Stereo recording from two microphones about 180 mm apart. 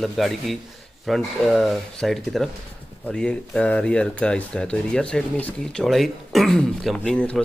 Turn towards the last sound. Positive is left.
turn(degrees=5)  # may be behind; listen again after turning